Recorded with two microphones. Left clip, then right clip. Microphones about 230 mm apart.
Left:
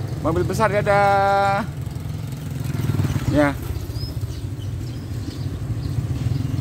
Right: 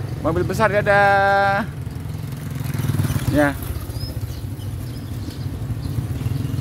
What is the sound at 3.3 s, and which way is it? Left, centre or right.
Speech, centre.